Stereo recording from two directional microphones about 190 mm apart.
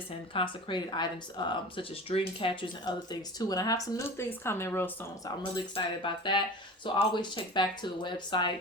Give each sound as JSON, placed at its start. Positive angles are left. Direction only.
{"t": 0.3, "sound": "speech", "side_deg": 25}
{"t": 5.7, "sound": "speech", "side_deg": 25}